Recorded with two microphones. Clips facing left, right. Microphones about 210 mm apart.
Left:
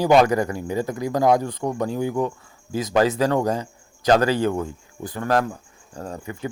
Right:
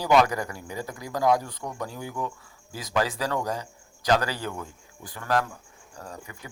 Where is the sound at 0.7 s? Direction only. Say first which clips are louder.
Left 9 dB; 45° left (ahead or behind).